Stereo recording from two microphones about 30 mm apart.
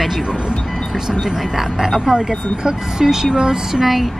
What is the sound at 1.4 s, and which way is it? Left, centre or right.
Speech, centre.